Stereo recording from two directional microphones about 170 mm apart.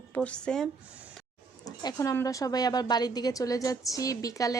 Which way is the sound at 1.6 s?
20° left (ahead or behind).